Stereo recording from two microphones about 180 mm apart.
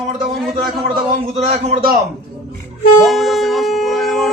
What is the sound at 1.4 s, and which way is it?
Speech, 40° right (ahead or behind).